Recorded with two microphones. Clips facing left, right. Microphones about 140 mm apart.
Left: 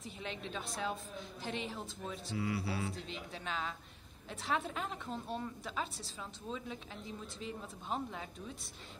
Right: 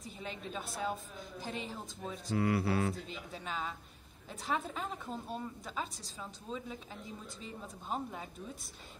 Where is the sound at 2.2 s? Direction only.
55° right (ahead or behind).